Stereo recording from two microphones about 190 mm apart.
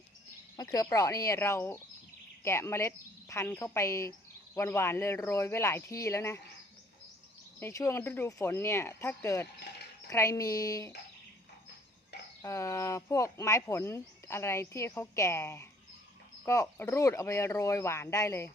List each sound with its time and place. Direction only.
0.5 s speech: 20° left (ahead or behind)
7.6 s speech: 15° left (ahead or behind)
12.4 s speech: 15° left (ahead or behind)